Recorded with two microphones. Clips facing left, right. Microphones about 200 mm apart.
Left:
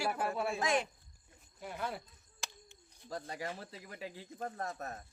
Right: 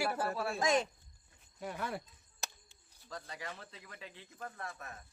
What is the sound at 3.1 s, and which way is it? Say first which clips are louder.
A man's voice: left 5 dB; 35° left (ahead or behind).